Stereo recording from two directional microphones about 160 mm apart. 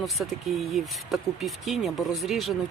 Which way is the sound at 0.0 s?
Centre (ahead or behind).